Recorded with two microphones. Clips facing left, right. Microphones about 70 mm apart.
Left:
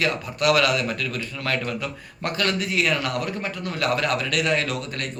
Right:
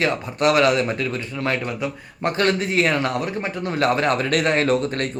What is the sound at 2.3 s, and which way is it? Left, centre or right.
A man's voice, right.